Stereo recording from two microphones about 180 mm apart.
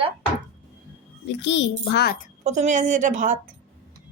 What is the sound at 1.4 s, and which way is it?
Speech, 80° left.